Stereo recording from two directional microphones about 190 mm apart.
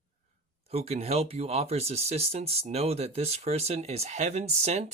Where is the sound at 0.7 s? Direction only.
35° right (ahead or behind).